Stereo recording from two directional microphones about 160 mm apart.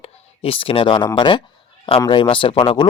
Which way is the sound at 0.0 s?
35° left (ahead or behind).